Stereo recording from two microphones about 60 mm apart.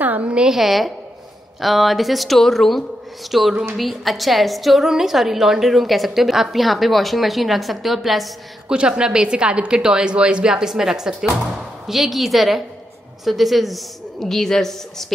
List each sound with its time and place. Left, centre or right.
0.0 s a sound: right
0.5 s a woman's voice: centre
8.6 s a woman's voice: centre